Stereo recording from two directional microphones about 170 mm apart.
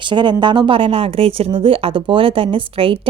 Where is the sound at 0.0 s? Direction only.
25° right (ahead or behind).